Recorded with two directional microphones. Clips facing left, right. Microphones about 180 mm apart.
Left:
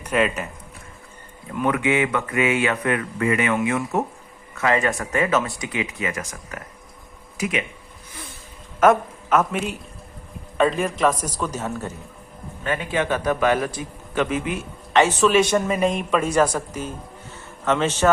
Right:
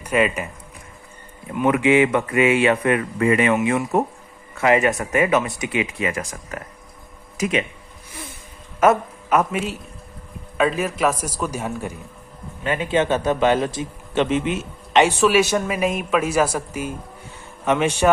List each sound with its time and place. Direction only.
0.0 s speech: 10° right (ahead or behind)
1.6 s speech: 25° right (ahead or behind)
8.8 s a woman's voice: 10° right (ahead or behind)
10.6 s a man's voice: 5° right (ahead or behind)